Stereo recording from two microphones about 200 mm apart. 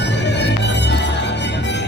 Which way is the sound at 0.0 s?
60° left (ahead or behind).